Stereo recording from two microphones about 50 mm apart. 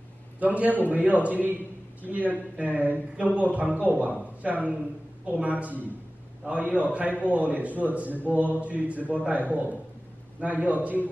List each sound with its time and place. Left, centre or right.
0.4 s a man's voice: right